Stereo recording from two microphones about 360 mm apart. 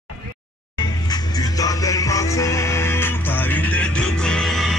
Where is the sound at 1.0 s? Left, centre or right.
Centre.